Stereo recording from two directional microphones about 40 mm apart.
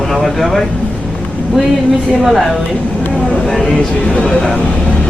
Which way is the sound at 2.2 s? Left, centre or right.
Centre.